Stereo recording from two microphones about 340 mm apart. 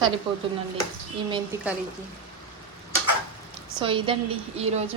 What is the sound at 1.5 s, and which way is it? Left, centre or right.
Speech, centre.